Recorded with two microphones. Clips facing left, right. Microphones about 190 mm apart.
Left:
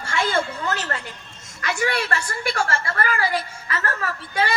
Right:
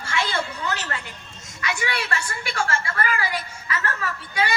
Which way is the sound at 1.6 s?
35° left (ahead or behind).